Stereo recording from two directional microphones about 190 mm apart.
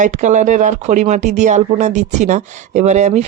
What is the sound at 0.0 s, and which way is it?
Speech, 40° right (ahead or behind).